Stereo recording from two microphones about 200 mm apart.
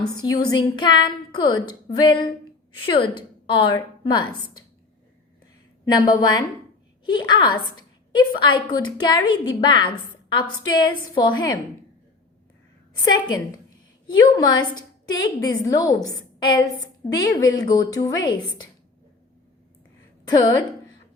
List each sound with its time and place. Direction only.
0.3 s a woman's voice: 20° left (ahead or behind)
5.8 s a woman's voice: 20° left (ahead or behind)
13.1 s a woman's voice: 20° left (ahead or behind)